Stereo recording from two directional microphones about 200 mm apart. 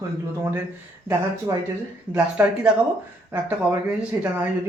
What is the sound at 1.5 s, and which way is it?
Speech, 15° right (ahead or behind).